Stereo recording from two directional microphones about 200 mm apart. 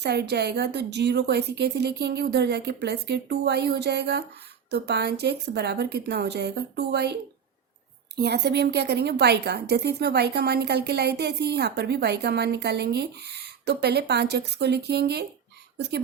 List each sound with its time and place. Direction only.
0.0 s a woman's voice: 55° right (ahead or behind)
8.2 s a woman's voice: 55° right (ahead or behind)